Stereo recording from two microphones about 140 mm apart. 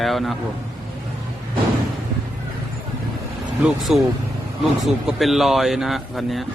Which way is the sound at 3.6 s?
5° right (ahead or behind).